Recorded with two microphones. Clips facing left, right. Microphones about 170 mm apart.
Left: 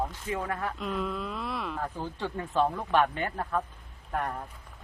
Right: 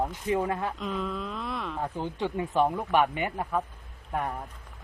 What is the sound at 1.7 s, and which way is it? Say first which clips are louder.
Speech: right 3 dB; 20° right (ahead or behind).